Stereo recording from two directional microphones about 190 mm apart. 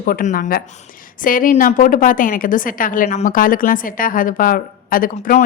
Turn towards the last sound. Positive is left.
turn(degrees=40)  # may be behind; listen again after turning